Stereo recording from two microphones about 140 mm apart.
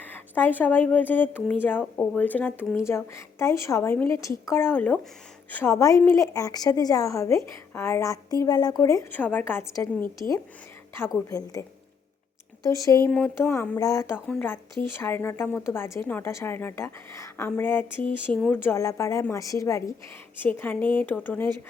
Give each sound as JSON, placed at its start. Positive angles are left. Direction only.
{"t": 0.0, "sound": "a woman's voice", "side_deg": 15}
{"t": 9.1, "sound": "a woman's voice", "side_deg": 10}
{"t": 12.6, "sound": "a woman's voice", "side_deg": 25}
{"t": 13.1, "sound": "a woman's voice", "side_deg": 10}